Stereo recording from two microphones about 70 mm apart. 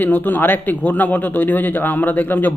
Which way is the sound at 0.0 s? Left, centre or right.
Left.